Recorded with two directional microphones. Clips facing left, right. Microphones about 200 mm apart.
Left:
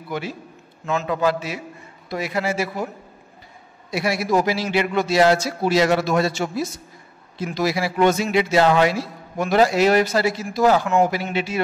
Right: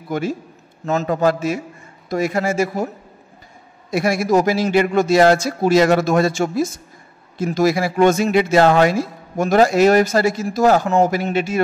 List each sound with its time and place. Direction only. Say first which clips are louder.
0.1 s a man's voice: right 6 dB; 45° right (ahead or behind)
3.9 s a man's voice: right 4 dB; 50° right (ahead or behind)